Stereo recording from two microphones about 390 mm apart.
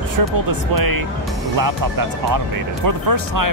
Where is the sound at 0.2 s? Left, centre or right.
Right.